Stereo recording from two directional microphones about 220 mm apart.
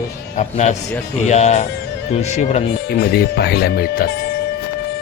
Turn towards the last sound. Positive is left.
turn(degrees=45)  # may be behind; listen again after turning